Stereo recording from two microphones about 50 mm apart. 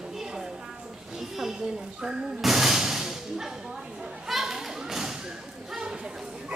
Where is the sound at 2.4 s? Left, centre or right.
Centre.